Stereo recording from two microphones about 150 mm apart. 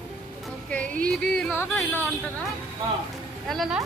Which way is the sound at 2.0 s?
5° left (ahead or behind).